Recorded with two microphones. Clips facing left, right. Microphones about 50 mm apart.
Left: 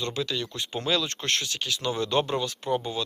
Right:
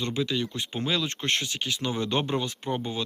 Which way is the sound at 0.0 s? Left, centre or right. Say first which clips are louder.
Right 2 dB; centre.